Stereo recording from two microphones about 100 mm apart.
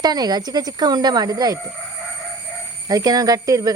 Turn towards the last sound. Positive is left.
turn(degrees=-35)  # may be behind; listen again after turning